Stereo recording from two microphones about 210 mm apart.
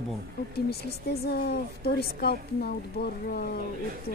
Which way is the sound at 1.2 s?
50° left (ahead or behind).